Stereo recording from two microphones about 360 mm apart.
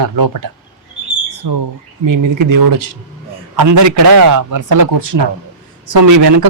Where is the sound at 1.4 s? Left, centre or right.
Right.